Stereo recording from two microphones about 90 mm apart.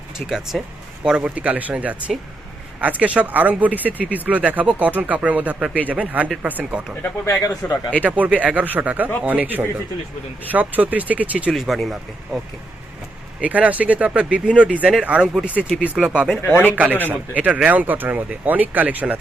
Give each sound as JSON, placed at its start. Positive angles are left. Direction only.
{"t": 0.3, "sound": "speech", "side_deg": -5}
{"t": 7.0, "sound": "speech", "side_deg": 30}
{"t": 7.7, "sound": "speech", "side_deg": 15}
{"t": 8.0, "sound": "speech", "side_deg": -15}
{"t": 11.5, "sound": "speech", "side_deg": 0}
{"t": 13.4, "sound": "speech", "side_deg": -15}
{"t": 15.4, "sound": "speech", "side_deg": 20}
{"t": 16.0, "sound": "speech", "side_deg": -10}